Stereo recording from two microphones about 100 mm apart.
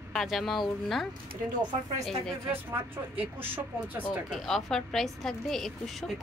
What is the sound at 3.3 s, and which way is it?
Speech, 20° right (ahead or behind).